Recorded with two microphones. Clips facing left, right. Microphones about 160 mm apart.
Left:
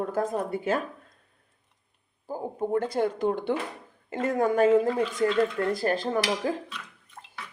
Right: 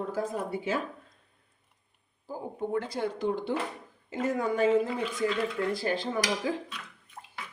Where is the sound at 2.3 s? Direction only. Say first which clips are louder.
Left 4 dB; 40° left (ahead or behind).